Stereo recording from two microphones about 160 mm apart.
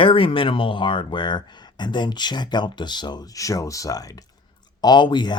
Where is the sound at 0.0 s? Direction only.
35° left (ahead or behind).